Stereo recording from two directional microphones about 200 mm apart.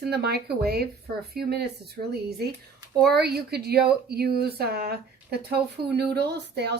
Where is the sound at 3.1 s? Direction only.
50° right (ahead or behind).